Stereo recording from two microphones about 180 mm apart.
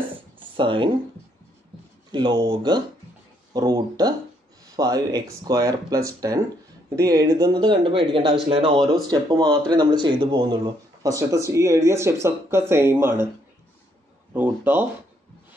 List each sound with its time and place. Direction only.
0.1 s a sound: 25° right (ahead or behind)
2.1 s speech: 25° right (ahead or behind)
14.3 s speech: 10° right (ahead or behind)